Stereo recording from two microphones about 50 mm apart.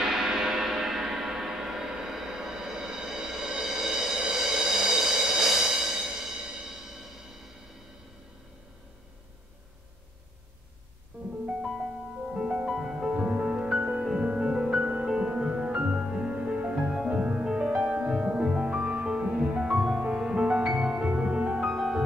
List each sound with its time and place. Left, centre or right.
0.0 s church bell: centre
12.3 s music: centre
21.6 s music: centre